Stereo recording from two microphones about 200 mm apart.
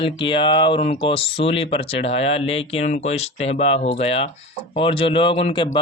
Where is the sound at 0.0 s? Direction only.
25° left (ahead or behind).